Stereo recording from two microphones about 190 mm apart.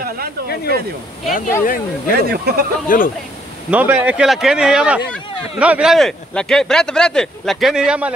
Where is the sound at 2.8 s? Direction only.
50° left (ahead or behind).